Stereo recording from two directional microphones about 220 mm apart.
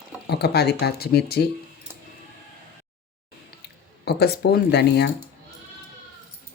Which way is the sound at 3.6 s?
50° left (ahead or behind).